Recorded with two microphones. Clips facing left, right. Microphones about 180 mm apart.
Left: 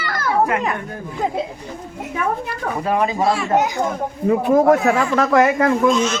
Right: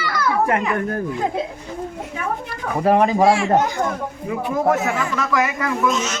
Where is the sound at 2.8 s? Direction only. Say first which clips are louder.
Right 4 dB; 40° right (ahead or behind).